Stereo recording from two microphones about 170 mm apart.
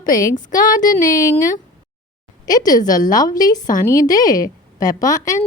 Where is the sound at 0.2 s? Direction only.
20° left (ahead or behind).